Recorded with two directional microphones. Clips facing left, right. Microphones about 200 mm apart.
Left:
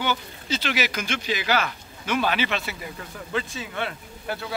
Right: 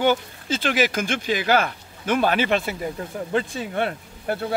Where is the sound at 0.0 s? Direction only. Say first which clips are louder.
Right 7 dB; 50° right (ahead or behind).